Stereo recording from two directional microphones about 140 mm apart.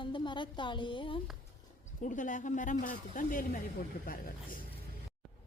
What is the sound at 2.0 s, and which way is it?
Speech, 65° left (ahead or behind).